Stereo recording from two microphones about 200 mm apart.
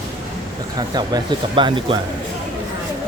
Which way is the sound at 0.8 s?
20° right (ahead or behind).